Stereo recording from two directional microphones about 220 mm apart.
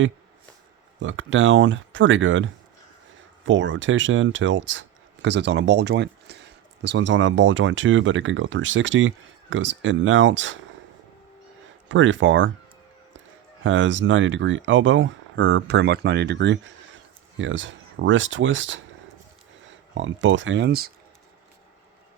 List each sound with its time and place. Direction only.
0.9 s speech: 60° right (ahead or behind)
11.9 s speech: 60° right (ahead or behind)
13.7 s speech: 60° right (ahead or behind)
19.6 s a sound: 60° right (ahead or behind)
20.2 s speech: 60° right (ahead or behind)